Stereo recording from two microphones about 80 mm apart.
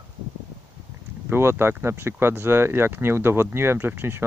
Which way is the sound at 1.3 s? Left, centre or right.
Right.